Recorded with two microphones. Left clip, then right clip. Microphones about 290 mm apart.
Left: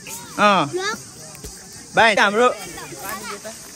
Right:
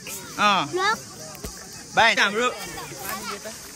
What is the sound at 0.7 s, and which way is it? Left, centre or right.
Speech, centre.